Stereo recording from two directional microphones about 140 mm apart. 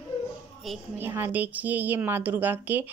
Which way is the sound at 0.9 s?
15° right (ahead or behind).